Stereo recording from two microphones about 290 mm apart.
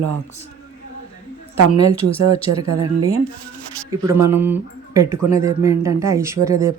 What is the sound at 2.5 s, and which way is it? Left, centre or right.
Speech, right.